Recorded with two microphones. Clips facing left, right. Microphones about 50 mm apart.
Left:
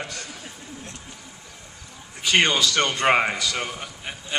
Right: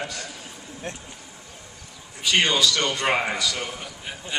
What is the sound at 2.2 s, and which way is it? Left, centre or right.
A man's voice, left.